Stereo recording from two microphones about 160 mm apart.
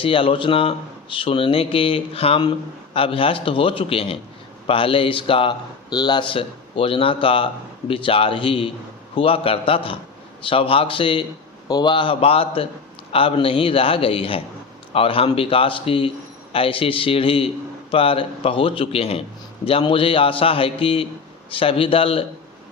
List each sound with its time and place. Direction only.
0.0 s speech: 35° left (ahead or behind)